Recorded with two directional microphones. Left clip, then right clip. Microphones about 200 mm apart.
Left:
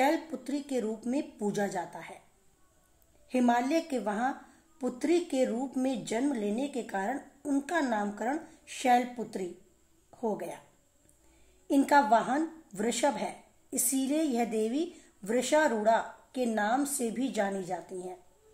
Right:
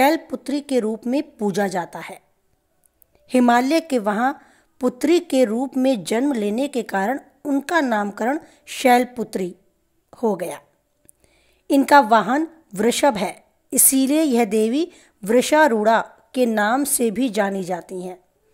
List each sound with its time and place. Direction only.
0.0 s a woman's voice: 45° right (ahead or behind)
3.3 s a woman's voice: 50° right (ahead or behind)
11.6 s a woman's voice: 45° right (ahead or behind)